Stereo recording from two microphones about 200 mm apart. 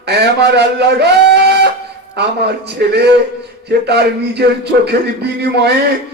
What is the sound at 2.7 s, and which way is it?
A man's voice, 55° right (ahead or behind).